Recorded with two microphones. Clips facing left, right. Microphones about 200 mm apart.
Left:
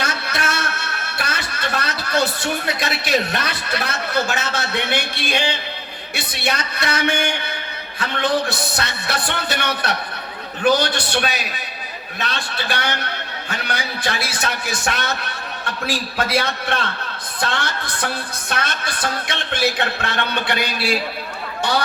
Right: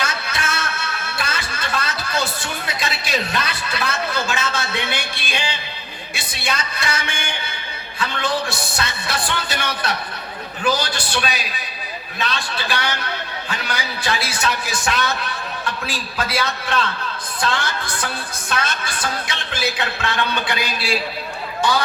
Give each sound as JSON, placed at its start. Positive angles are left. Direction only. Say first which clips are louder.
{"t": 0.0, "sound": "a man's voice", "louder": "left 2 dB", "side_deg": 60}
{"t": 18.0, "sound": "speech", "louder": "left 2 dB", "side_deg": 60}